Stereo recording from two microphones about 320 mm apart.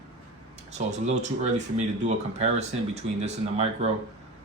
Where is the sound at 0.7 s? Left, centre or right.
Right.